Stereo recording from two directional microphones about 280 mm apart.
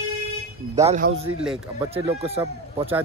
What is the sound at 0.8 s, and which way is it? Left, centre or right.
Speech, right.